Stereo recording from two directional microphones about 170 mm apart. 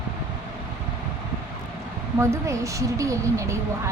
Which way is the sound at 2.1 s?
15° right (ahead or behind).